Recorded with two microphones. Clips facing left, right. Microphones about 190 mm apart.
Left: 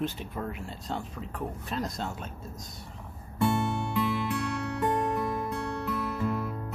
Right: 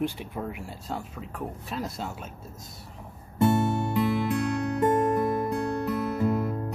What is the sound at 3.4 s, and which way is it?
Music, 45° right (ahead or behind).